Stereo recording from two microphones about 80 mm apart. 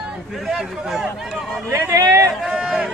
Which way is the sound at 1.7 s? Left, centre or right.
Right.